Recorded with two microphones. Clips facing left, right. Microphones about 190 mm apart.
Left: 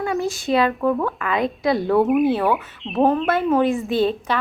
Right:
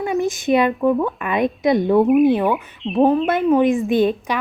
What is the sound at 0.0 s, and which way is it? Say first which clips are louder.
Speech: right 3 dB; 20° right (ahead or behind).